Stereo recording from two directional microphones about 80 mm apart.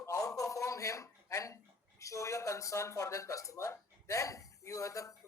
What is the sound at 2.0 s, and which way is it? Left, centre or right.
Speech, left.